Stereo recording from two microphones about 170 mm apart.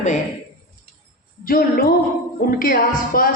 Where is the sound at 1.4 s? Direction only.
55° left (ahead or behind).